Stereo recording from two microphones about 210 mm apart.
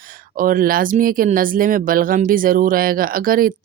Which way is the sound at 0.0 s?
40° right (ahead or behind).